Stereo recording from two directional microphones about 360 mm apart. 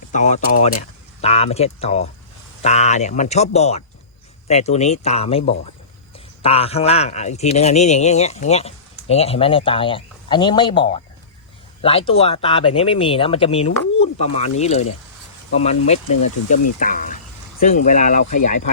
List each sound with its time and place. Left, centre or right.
0.1 s speech: centre